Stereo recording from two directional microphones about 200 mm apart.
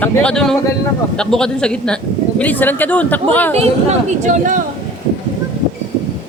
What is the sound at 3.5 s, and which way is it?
Speech, 35° right (ahead or behind).